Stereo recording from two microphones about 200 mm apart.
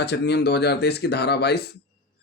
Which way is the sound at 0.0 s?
55° left (ahead or behind).